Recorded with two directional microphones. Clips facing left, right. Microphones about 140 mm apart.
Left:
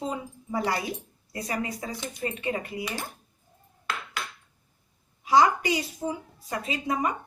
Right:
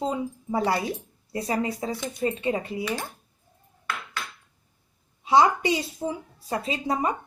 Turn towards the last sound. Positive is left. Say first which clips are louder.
# right 2 dB
turn(degrees=-30)  # may be behind; listen again after turning